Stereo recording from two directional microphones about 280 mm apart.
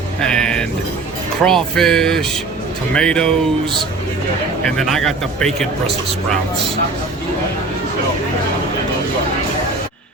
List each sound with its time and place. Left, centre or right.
0.2 s a sound: centre
1.5 s a man's voice: centre
4.8 s a man's voice: centre